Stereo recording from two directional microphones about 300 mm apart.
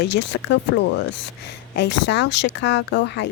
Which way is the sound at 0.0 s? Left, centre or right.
Left.